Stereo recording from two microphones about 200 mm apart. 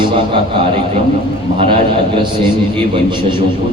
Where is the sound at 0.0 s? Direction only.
25° right (ahead or behind).